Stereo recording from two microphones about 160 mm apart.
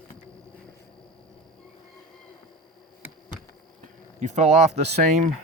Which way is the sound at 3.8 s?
50° right (ahead or behind).